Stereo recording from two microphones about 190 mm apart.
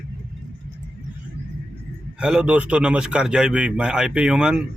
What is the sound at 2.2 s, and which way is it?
A man's voice, 5° right (ahead or behind).